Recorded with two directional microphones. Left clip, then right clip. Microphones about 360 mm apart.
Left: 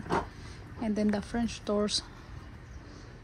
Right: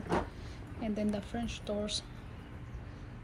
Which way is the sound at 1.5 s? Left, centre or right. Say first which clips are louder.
Left 7 dB; centre.